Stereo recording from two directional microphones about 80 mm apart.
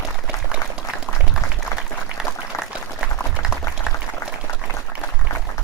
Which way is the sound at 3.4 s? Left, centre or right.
Left.